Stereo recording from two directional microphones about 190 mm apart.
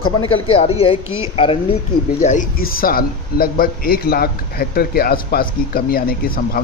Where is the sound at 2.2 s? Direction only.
45° left (ahead or behind).